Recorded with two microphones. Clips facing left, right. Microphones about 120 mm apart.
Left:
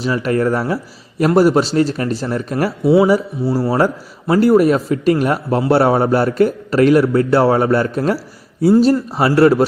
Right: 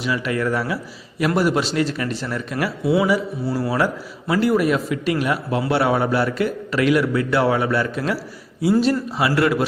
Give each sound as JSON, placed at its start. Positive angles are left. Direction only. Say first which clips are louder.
{"t": 0.0, "sound": "a man's voice", "louder": "left 6 dB", "side_deg": 40}
{"t": 2.8, "sound": "a man's voice", "louder": "left 7 dB", "side_deg": 30}